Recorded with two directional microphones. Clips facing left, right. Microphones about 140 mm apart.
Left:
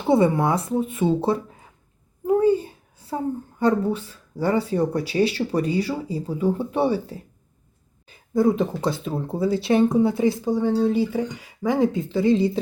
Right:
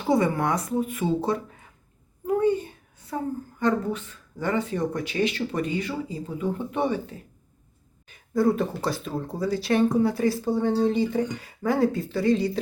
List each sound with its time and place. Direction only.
0.0 s speech: 25° left (ahead or behind)
2.2 s a sound: 30° left (ahead or behind)
3.6 s speech: 35° left (ahead or behind)
8.1 s speech: 20° left (ahead or behind)
10.7 s speech: 5° left (ahead or behind); by 12.5 s 25° left (ahead or behind)